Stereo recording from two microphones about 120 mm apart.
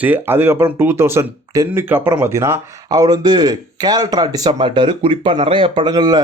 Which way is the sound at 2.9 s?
35° right (ahead or behind).